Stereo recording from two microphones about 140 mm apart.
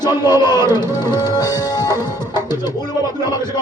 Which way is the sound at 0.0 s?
30° left (ahead or behind).